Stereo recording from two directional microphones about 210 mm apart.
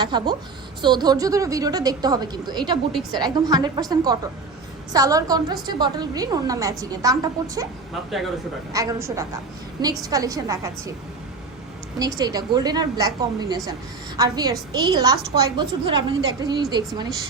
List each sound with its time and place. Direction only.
0.0 s a woman's voice: 20° right (ahead or behind)
8.7 s a woman's voice: 15° right (ahead or behind)
11.9 s a woman's voice: 15° right (ahead or behind)